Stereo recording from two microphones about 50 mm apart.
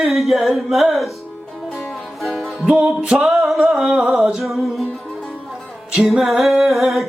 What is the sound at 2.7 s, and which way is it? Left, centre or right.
Music, centre.